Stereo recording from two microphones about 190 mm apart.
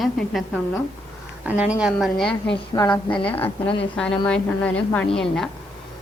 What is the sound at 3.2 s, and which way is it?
A woman's voice, 10° left (ahead or behind).